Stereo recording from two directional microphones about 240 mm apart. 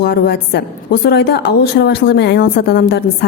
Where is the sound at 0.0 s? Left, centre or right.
Left.